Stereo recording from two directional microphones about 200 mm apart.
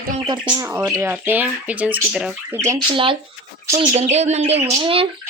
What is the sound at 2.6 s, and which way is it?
Speech, 20° right (ahead or behind).